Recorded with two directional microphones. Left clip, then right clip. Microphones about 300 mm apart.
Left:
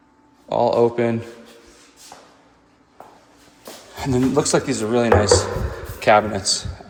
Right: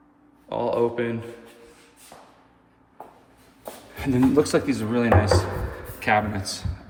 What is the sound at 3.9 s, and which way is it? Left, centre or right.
Speech, left.